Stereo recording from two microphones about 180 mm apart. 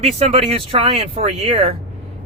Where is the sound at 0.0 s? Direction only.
35° right (ahead or behind).